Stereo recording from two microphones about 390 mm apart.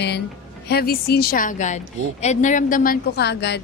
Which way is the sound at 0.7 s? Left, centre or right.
Left.